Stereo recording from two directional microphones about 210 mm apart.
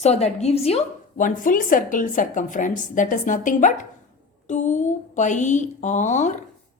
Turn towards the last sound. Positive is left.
turn(degrees=35)  # may be behind; listen again after turning